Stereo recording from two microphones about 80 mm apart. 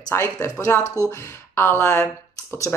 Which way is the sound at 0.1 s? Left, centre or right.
Left.